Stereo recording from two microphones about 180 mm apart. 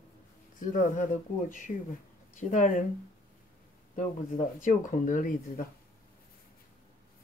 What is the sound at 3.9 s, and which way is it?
Speech, 45° left (ahead or behind).